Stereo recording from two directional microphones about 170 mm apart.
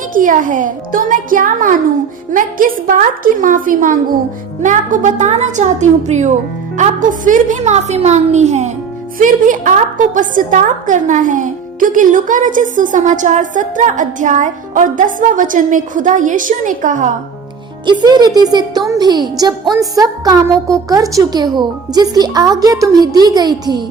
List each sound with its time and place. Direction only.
0.1 s a woman's voice: 50° right (ahead or behind)
17.8 s a woman's voice: 25° right (ahead or behind)